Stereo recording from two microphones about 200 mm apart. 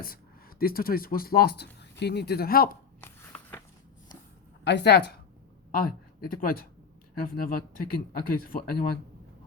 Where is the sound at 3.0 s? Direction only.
10° left (ahead or behind).